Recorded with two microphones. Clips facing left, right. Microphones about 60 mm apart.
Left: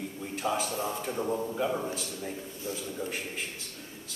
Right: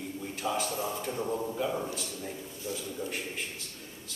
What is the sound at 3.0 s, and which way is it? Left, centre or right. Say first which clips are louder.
Speech: even; centre.